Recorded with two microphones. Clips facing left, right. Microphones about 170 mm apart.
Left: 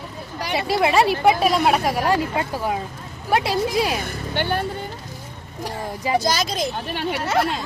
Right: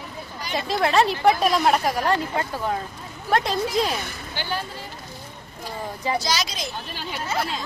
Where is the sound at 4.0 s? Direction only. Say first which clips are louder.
Left 7 dB; 60° left (ahead or behind).